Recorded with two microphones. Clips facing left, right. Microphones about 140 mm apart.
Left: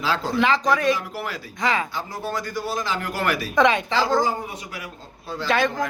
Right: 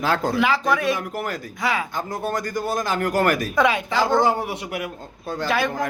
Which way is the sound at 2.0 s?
50° right (ahead or behind).